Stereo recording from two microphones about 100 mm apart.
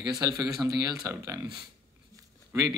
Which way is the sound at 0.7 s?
35° right (ahead or behind).